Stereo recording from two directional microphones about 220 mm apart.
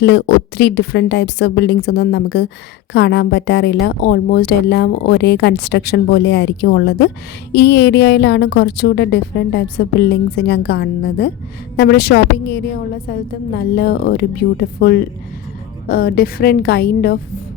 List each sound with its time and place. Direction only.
0.0 s a woman's voice: 50° left (ahead or behind)